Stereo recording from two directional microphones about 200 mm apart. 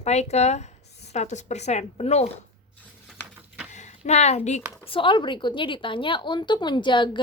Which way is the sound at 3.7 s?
35° left (ahead or behind).